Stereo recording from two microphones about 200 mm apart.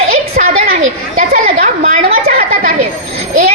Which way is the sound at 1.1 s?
45° right (ahead or behind).